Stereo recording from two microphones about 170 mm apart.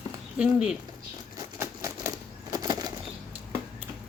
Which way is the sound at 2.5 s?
25° right (ahead or behind).